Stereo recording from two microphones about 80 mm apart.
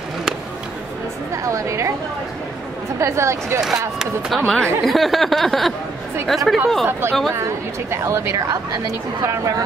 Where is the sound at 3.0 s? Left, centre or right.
Right.